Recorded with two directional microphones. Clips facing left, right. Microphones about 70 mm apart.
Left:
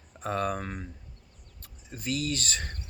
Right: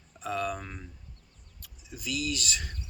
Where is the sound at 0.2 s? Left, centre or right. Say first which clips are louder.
Left 2 dB; left.